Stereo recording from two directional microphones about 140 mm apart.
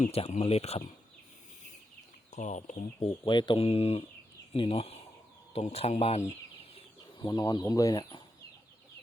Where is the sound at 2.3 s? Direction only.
60° left (ahead or behind).